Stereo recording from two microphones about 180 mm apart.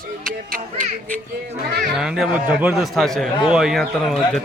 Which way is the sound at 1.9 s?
5° right (ahead or behind).